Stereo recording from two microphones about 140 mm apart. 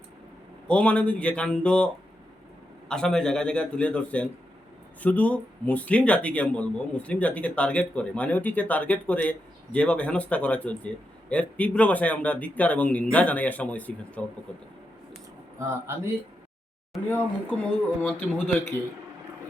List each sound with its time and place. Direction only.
0.7 s speech: 10° left (ahead or behind)
2.9 s speech: 5° left (ahead or behind)
15.5 s speech: 20° right (ahead or behind)
17.1 s speech: 10° left (ahead or behind)